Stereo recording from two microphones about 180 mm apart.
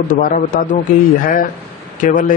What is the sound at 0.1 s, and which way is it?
A man's voice, 50° left (ahead or behind).